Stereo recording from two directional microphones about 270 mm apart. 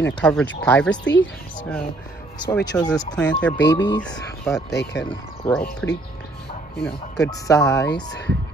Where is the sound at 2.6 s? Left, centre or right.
Centre.